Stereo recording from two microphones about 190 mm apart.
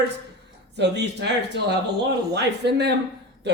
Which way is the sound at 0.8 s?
65° right (ahead or behind).